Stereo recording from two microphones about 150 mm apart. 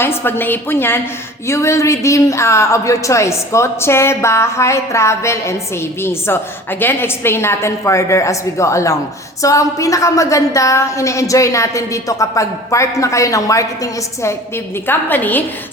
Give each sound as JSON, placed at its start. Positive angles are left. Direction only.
{"t": 0.0, "sound": "a woman's voice", "side_deg": 15}